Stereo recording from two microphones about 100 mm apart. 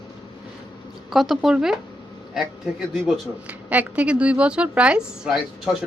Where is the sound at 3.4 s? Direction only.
15° right (ahead or behind).